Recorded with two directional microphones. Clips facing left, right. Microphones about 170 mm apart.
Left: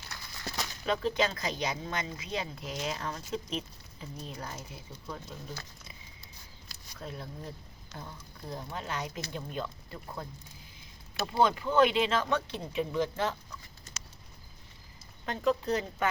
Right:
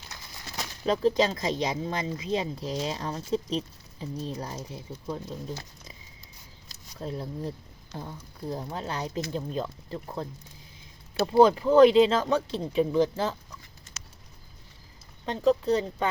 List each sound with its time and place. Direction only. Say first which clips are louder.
0.9 s speech: right 6 dB; 35° right (ahead or behind)
6.7 s a sound: right 7 dB; 30° right (ahead or behind)
7.9 s speech: right 6 dB; 60° left (ahead or behind)
8.5 s speech: right 2 dB; 35° right (ahead or behind)
15.3 s speech: right 6 dB; 30° right (ahead or behind)